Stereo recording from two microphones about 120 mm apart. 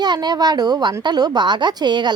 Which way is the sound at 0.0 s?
35° right (ahead or behind).